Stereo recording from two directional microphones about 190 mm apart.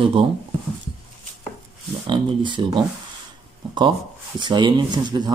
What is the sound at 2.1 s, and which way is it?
Speech, 25° right (ahead or behind).